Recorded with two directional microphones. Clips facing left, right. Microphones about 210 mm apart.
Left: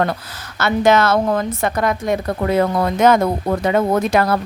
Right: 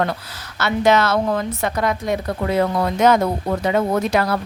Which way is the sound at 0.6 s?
50° left (ahead or behind).